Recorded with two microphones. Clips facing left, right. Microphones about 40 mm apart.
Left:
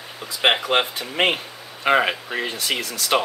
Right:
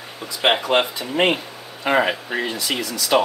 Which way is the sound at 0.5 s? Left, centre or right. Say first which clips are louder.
Right 1 dB; centre.